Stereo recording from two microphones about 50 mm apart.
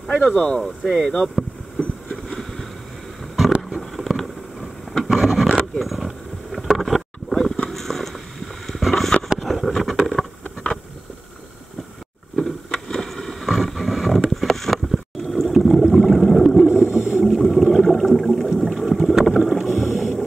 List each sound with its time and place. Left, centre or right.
0.2 s speech: left
0.6 s speech: centre
1.8 s vehicle: centre
3.9 s a sound: centre
5.8 s boat: centre
7.7 s a sound: centre
12.4 s vehicle: centre
15.3 s boat: centre
15.9 s a sound: centre
16.6 s boat: centre
17.3 s a sound: centre
18.7 s boat: centre